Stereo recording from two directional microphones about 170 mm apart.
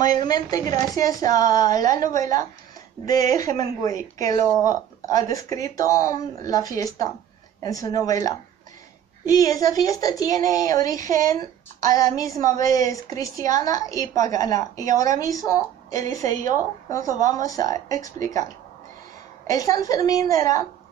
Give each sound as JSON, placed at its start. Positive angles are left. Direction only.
{"t": 0.0, "sound": "speech", "side_deg": 25}
{"t": 19.4, "sound": "speech", "side_deg": 20}